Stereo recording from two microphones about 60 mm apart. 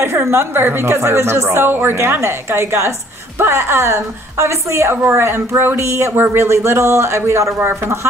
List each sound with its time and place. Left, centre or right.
0.0 s a woman's voice: right